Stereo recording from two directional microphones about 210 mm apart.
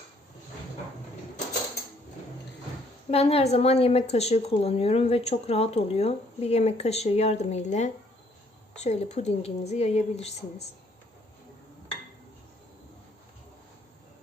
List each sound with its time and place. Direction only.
3.1 s a woman's voice: 30° left (ahead or behind)